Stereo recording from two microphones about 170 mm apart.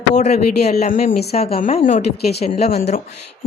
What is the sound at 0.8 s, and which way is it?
Speech, 50° left (ahead or behind).